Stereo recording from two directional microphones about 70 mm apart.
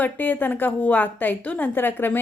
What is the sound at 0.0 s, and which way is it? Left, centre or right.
A woman's voice, left.